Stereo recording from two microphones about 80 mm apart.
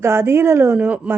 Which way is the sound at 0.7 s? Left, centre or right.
Centre.